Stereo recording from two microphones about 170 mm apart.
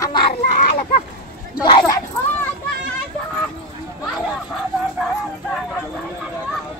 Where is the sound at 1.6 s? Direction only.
25° left (ahead or behind).